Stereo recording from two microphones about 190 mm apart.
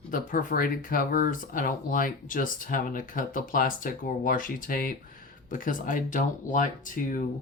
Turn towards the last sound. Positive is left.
turn(degrees=45)  # may be behind; listen again after turning